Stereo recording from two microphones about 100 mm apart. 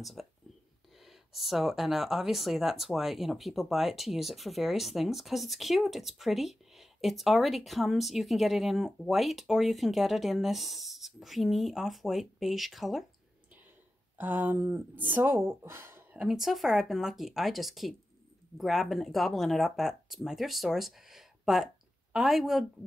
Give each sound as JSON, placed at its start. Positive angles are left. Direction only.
{"t": 0.0, "sound": "speech", "side_deg": 0}
{"t": 14.1, "sound": "speech", "side_deg": -20}
{"t": 16.2, "sound": "speech", "side_deg": -5}